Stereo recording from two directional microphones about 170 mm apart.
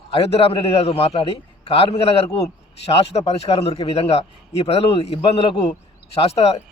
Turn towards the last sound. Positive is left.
turn(degrees=35)  # may be behind; listen again after turning